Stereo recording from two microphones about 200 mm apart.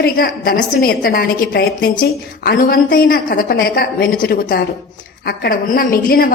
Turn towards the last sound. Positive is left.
turn(degrees=45)  # may be behind; listen again after turning